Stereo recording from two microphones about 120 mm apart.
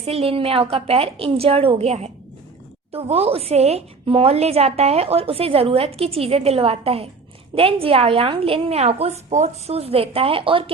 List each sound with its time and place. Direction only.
0.0 s a woman's voice: 55° right (ahead or behind)